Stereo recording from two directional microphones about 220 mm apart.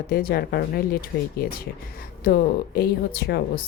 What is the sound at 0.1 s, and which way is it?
A woman's voice, 40° left (ahead or behind).